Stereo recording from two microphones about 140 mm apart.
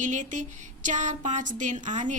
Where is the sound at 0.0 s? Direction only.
60° right (ahead or behind).